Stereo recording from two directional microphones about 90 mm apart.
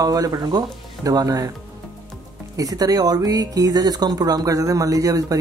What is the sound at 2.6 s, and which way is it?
Speech, 45° right (ahead or behind).